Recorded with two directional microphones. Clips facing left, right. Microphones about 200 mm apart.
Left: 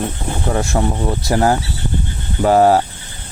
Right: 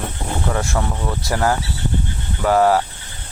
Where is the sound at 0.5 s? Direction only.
30° left (ahead or behind).